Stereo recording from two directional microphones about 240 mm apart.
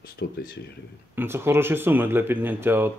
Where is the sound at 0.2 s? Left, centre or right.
Left.